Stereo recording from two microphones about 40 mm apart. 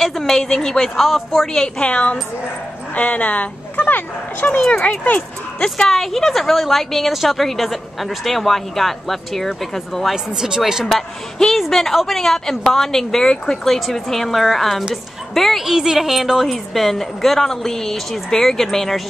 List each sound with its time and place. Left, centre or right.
0.0 s a woman's voice: centre
1.8 s a woman's voice: left
5.9 s a woman's voice: centre
10.1 s speech: centre
10.9 s a woman's voice: centre
13.7 s a woman's voice: centre
15.6 s a woman's voice: centre